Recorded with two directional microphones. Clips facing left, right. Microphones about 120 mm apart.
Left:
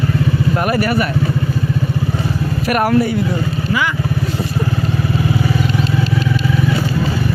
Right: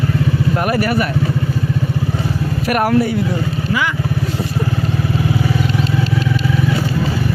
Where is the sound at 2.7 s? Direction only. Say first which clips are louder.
Even; 5° right (ahead or behind).